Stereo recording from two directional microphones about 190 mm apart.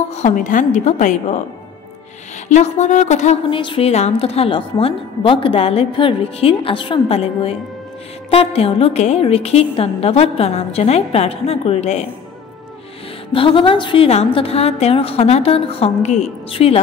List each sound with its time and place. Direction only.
0.1 s a woman's voice: 40° left (ahead or behind)
2.4 s a woman's voice: 40° left (ahead or behind)
13.3 s a woman's voice: 25° left (ahead or behind)